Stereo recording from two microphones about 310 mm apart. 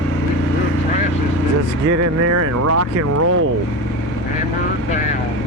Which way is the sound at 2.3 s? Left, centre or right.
Right.